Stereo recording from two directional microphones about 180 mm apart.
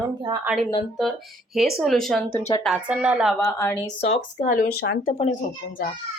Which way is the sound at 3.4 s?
15° left (ahead or behind).